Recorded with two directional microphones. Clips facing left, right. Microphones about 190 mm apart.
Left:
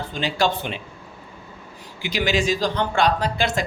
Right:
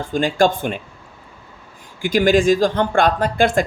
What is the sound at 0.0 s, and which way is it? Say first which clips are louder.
Speech: right 6 dB; 50° right (ahead or behind).